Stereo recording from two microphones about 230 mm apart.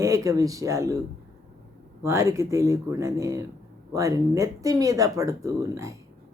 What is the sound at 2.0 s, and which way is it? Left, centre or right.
Speech, centre.